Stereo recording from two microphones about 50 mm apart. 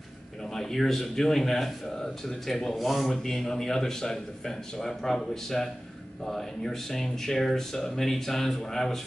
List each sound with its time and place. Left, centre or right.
0.6 s speech: centre